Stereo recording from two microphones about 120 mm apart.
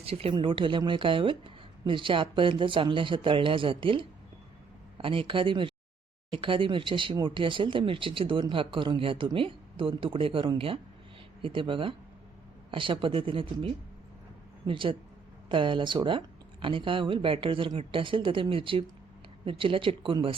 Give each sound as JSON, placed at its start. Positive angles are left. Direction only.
{"t": 0.0, "sound": "speech", "side_deg": -55}